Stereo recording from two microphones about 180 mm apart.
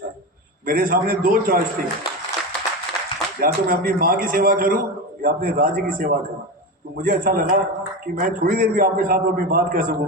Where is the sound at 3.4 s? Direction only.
55° right (ahead or behind).